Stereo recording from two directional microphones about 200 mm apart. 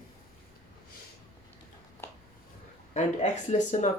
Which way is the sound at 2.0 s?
10° left (ahead or behind).